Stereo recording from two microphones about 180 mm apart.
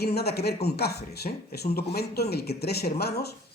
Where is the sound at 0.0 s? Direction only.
60° left (ahead or behind).